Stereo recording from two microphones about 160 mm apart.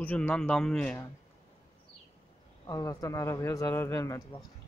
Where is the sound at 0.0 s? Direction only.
10° left (ahead or behind).